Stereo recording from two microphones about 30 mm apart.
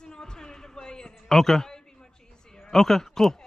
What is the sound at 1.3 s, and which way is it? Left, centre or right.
A man's voice, centre.